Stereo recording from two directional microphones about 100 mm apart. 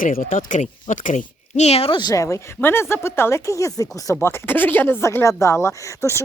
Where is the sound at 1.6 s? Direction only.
90° left.